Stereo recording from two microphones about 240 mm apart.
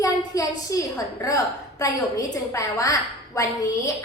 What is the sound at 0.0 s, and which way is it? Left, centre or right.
A woman's voice, centre.